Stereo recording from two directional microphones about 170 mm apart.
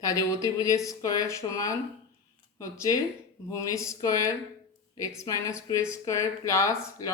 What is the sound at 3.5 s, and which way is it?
Speech, 20° left (ahead or behind).